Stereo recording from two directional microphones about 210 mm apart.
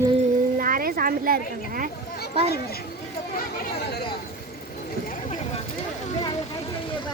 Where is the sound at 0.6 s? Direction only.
45° right (ahead or behind).